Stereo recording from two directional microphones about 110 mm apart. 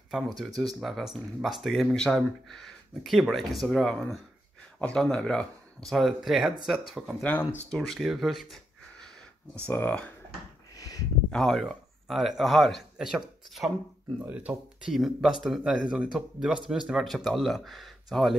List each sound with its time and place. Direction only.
0.4 s speech: centre (ahead or behind)
7.2 s speech: 15° left (ahead or behind)
7.7 s speech: 5° left (ahead or behind)
9.7 s speech: 15° left (ahead or behind)
10.8 s a sound: 30° left (ahead or behind)
11.2 s speech: 5° left (ahead or behind)